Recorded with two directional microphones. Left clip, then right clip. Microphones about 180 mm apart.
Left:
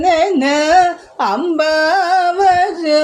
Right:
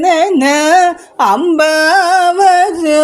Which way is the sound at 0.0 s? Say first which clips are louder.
Right 3 dB; 40° right (ahead or behind).